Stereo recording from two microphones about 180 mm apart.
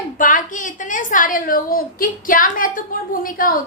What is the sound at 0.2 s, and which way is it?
A woman's voice, 45° left (ahead or behind).